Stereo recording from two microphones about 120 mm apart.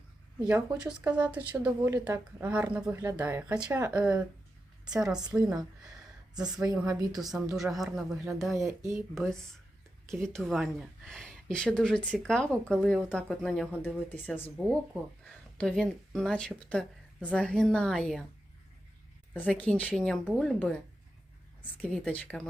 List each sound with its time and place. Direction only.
0.3 s a woman's voice: 10° right (ahead or behind)
3.0 s a woman's voice: 25° right (ahead or behind)
3.2 s a woman's voice: 15° right (ahead or behind)
6.6 s a woman's voice: 30° right (ahead or behind)
7.2 s speech: centre (ahead or behind)
8.5 s a woman's voice: 25° right (ahead or behind)
10.1 s speech: 5° left (ahead or behind)
19.3 s speech: 15° left (ahead or behind)
21.9 s speech: 10° left (ahead or behind)